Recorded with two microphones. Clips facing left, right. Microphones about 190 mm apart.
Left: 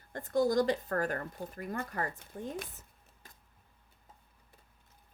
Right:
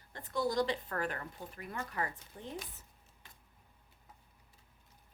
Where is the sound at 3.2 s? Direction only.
40° left (ahead or behind).